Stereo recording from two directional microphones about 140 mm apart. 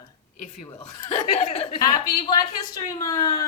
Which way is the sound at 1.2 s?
50° left (ahead or behind).